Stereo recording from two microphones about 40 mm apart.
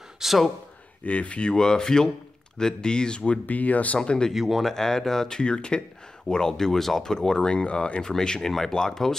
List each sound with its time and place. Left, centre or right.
0.2 s speech: centre
1.0 s speech: left
1.4 s speech: centre
3.4 s speech: left
4.0 s speech: centre
4.3 s speech: centre
4.7 s speech: centre
5.4 s speech: left
6.2 s speech: centre; by 8.0 s left
8.0 s speech: centre